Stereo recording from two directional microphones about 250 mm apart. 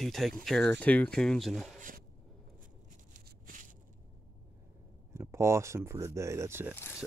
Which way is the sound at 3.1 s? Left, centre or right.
Right.